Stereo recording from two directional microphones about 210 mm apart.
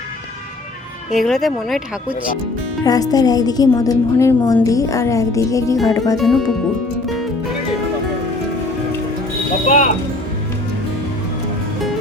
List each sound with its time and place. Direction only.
1.1 s speech: centre (ahead or behind)
2.8 s a woman's voice: 15° left (ahead or behind)
6.1 s speech: centre (ahead or behind)
9.6 s speech: 35° left (ahead or behind)